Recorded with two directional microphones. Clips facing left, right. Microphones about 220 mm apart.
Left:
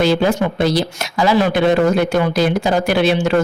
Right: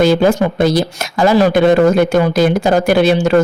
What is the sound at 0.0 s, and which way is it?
Speech, 45° right (ahead or behind).